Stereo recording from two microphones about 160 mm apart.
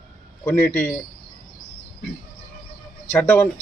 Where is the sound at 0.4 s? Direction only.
5° left (ahead or behind).